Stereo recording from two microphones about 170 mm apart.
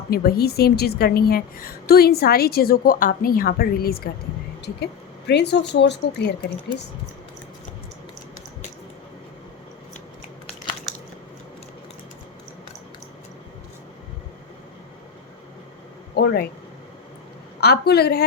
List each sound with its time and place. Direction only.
0.1 s a woman's voice: 60° left (ahead or behind)
5.3 s a woman's voice: 80° left
16.1 s speech: 70° left (ahead or behind)
17.6 s a woman's voice: 70° left (ahead or behind)